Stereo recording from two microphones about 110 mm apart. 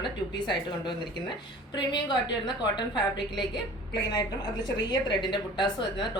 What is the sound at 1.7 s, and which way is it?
A woman's voice, 45° left (ahead or behind).